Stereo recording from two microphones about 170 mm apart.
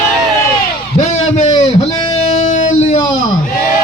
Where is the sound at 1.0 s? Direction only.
40° left (ahead or behind).